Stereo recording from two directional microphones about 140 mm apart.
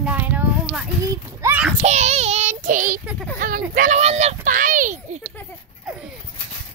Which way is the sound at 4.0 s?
50° right (ahead or behind).